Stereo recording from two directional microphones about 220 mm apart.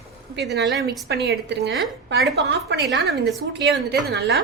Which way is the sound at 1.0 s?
50° right (ahead or behind).